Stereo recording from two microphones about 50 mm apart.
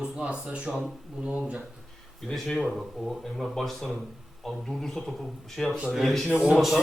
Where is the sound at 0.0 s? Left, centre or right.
Right.